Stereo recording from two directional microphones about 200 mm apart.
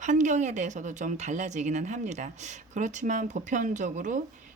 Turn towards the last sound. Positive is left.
turn(degrees=-40)  # may be behind; listen again after turning